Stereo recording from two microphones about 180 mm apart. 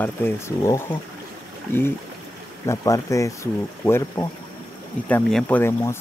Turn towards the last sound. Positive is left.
turn(degrees=10)  # may be behind; listen again after turning